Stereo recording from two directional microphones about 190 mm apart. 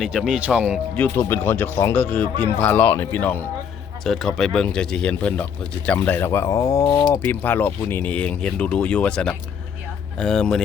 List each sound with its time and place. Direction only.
0.0 s speech: 5° right (ahead or behind)
0.9 s speech: 10° left (ahead or behind)